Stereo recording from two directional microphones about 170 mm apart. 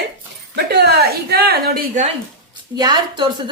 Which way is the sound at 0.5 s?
75° right (ahead or behind).